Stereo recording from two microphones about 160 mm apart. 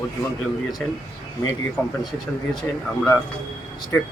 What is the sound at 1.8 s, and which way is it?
Speech, 15° left (ahead or behind).